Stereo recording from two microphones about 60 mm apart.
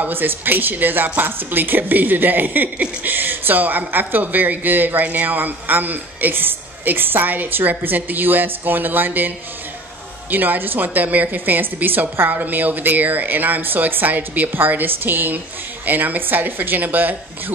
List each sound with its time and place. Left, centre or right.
0.0 s a woman's voice: right
10.3 s a woman's voice: right